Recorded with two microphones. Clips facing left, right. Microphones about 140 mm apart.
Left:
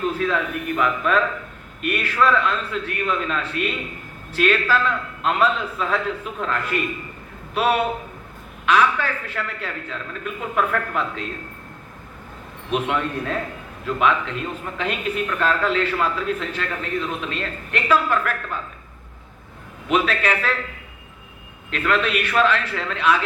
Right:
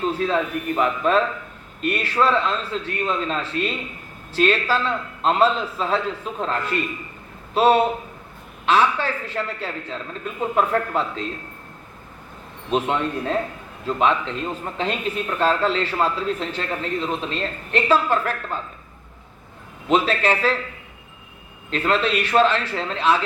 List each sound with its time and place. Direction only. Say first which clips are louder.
0.0 s a woman's voice: right 1 dB; 30° right (ahead or behind)
12.7 s speech: right 1 dB; 30° right (ahead or behind)
19.9 s a woman's voice: right 2 dB; 30° right (ahead or behind)
21.7 s speech: right 1 dB; 30° right (ahead or behind)